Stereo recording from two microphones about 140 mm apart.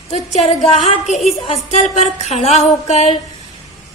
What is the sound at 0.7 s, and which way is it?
Speech, 50° left (ahead or behind).